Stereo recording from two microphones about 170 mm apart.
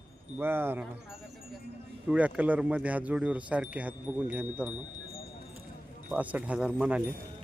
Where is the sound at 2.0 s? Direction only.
10° right (ahead or behind).